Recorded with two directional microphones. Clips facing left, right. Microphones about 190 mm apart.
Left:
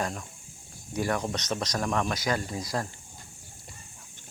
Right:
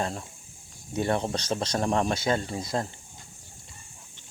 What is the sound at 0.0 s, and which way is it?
Speech, 30° right (ahead or behind).